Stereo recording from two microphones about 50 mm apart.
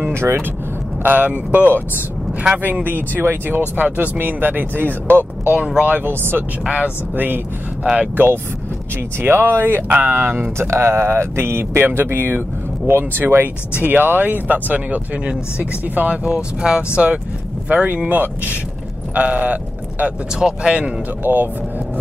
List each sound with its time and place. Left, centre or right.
0.1 s speech: right
1.0 s speech: right
6.7 s speech: right
9.2 s speech: right
9.8 s speech: right
10.1 s speech: right
13.2 s speech: right
16.3 s speech: centre
20.3 s speech: centre
21.2 s speech: right